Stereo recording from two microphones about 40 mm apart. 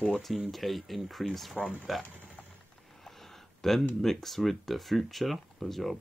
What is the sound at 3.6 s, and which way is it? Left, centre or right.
Speech, centre.